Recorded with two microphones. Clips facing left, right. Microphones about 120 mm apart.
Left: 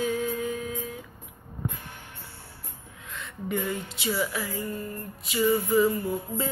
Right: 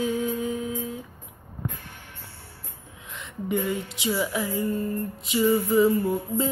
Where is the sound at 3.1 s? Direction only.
20° right (ahead or behind).